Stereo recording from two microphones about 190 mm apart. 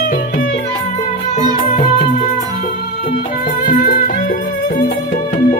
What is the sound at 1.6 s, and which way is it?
Music, 35° left (ahead or behind).